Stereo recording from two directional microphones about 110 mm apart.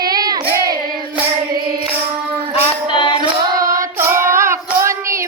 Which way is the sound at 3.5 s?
30° right (ahead or behind).